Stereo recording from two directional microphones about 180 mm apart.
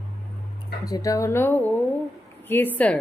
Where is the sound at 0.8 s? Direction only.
20° left (ahead or behind).